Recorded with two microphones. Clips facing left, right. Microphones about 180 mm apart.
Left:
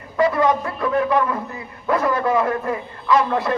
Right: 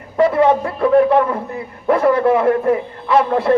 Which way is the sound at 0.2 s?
30° right (ahead or behind).